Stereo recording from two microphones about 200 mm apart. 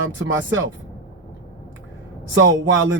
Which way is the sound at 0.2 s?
75° right (ahead or behind).